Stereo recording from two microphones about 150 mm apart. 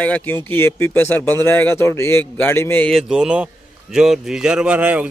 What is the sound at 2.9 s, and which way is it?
Speech, centre (ahead or behind).